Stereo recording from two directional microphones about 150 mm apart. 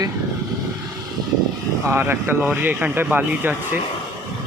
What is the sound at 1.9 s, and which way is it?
Speech, 15° right (ahead or behind).